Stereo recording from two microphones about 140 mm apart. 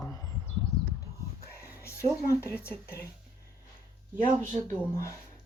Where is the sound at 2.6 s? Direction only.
15° left (ahead or behind).